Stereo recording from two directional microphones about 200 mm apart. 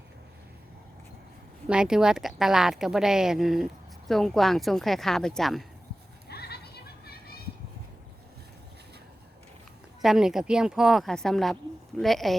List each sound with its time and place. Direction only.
1.6 s a woman's voice: 5° right (ahead or behind)
6.2 s goat: 55° left (ahead or behind)
10.0 s a woman's voice: centre (ahead or behind)